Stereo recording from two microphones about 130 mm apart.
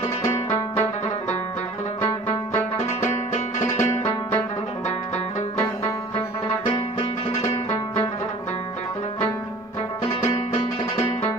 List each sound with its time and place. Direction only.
0.2 s music: 20° left (ahead or behind)
2.5 s music: 20° left (ahead or behind)